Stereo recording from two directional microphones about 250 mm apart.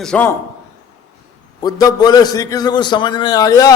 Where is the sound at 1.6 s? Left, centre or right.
Centre.